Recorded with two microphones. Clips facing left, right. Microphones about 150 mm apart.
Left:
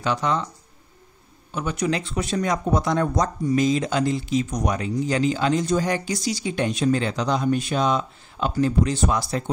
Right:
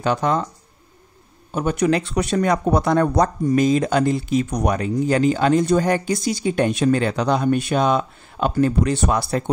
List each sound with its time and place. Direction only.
0.0 s speech: 50° right (ahead or behind)
1.5 s speech: 50° right (ahead or behind)